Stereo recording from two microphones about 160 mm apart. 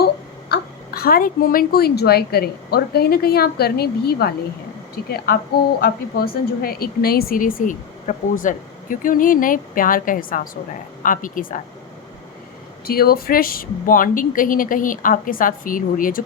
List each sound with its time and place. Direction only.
0.0 s a child's voice: 80° left; by 11.6 s 60° left (ahead or behind)
12.8 s a woman's voice: 70° left (ahead or behind)